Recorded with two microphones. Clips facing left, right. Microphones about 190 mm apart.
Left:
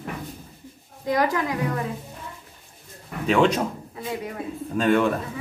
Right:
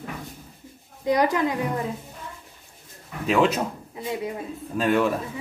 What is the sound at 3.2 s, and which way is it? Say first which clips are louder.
Speech: left 1 dB; centre (ahead or behind).